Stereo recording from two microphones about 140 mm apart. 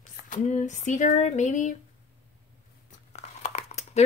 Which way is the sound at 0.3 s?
60° left (ahead or behind).